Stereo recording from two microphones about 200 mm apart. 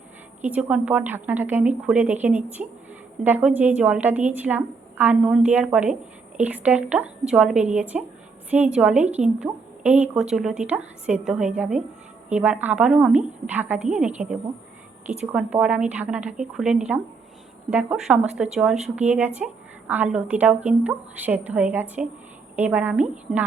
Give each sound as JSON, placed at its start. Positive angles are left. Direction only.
{"t": 0.4, "sound": "a woman's voice", "side_deg": -5}